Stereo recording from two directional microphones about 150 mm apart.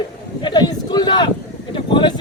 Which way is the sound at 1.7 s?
30° left (ahead or behind).